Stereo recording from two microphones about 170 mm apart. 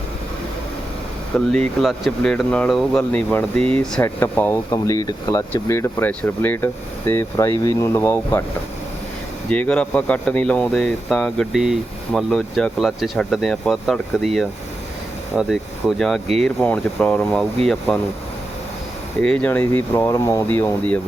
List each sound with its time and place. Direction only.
1.5 s speech: centre (ahead or behind)
9.5 s speech: 5° left (ahead or behind)
19.2 s speech: 5° left (ahead or behind)